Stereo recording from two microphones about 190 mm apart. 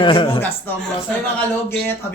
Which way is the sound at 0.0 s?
25° left (ahead or behind).